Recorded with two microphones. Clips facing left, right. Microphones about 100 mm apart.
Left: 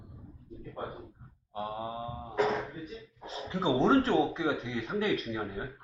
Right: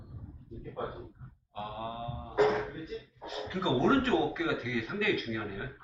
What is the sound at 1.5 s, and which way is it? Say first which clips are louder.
Mantra: left 2 dB; 25° left (ahead or behind).